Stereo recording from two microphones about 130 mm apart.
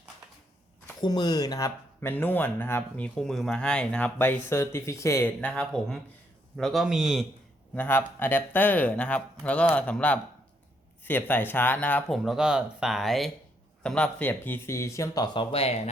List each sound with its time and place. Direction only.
1.0 s speech: 35° left (ahead or behind)
5.4 s speech: 10° left (ahead or behind)
7.8 s speech: 15° left (ahead or behind)
12.1 s speech: centre (ahead or behind); by 15.8 s 50° left (ahead or behind)